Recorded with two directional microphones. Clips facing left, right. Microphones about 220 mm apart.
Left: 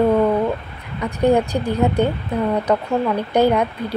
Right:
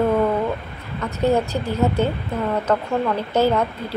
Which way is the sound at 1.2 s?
15° left (ahead or behind).